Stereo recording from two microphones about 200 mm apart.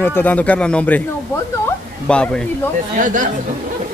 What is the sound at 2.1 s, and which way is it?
Speech, 5° left (ahead or behind).